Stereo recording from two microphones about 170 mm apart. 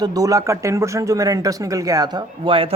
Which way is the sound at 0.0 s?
20° right (ahead or behind).